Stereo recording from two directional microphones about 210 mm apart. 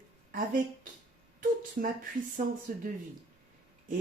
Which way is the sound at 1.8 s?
40° right (ahead or behind).